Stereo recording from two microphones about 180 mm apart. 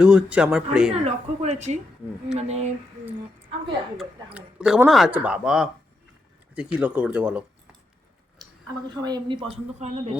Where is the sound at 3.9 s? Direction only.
5° right (ahead or behind).